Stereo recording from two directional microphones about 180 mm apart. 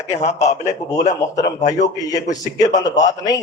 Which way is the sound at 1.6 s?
40° left (ahead or behind).